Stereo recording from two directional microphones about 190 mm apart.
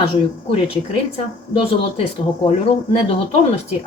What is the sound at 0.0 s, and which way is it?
A woman's voice, 30° left (ahead or behind).